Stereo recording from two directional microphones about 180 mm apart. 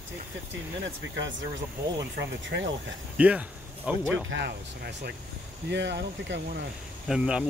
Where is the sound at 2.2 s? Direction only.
85° right.